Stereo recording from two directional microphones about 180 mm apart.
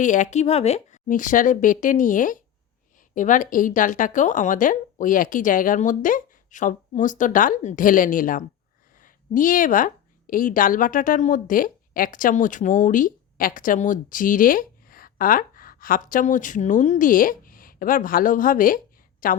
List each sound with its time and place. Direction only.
0.0 s a woman's voice: 45° left (ahead or behind)